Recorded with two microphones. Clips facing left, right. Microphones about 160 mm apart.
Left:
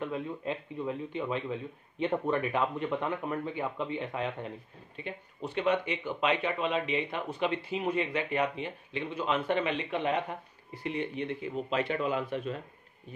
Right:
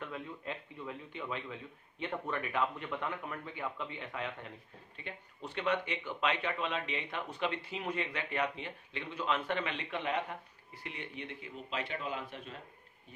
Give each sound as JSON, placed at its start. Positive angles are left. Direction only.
{"t": 0.0, "sound": "speech", "side_deg": 20}
{"t": 4.9, "sound": "speech", "side_deg": 15}
{"t": 10.8, "sound": "speech", "side_deg": 30}
{"t": 11.7, "sound": "a man's voice", "side_deg": 60}